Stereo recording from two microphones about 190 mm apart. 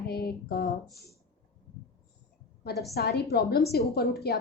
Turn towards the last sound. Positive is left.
turn(degrees=55)  # may be behind; listen again after turning